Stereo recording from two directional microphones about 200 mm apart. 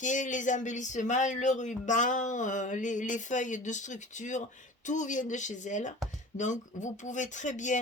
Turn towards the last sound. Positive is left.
turn(degrees=40)  # may be behind; listen again after turning